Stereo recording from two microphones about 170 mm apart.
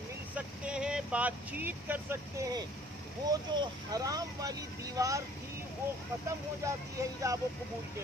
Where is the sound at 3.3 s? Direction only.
25° right (ahead or behind).